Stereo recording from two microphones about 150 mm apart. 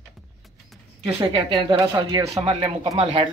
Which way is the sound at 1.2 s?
30° right (ahead or behind).